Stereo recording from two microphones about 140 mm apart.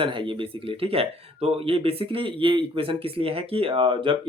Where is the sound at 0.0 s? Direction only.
35° right (ahead or behind).